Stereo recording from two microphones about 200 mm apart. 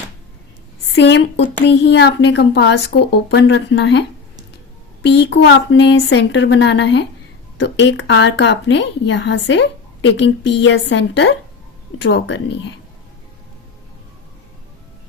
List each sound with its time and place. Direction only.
0.9 s a woman's voice: 60° left (ahead or behind)
5.0 s a woman's voice: 60° left (ahead or behind)